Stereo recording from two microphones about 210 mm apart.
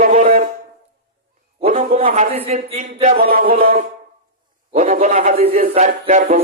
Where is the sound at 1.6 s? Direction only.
40° right (ahead or behind).